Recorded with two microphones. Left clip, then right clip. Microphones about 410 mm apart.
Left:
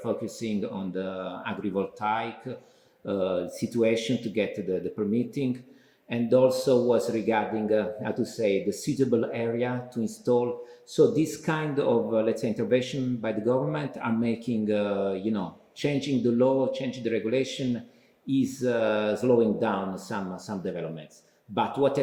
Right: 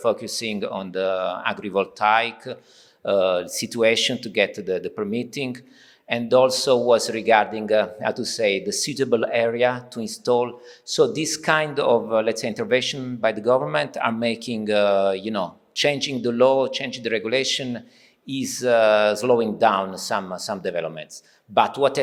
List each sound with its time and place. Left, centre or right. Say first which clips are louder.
0.0 s speech: right 8 dB; right